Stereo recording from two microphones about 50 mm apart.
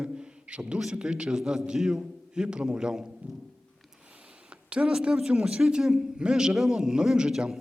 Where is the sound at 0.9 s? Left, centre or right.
Centre.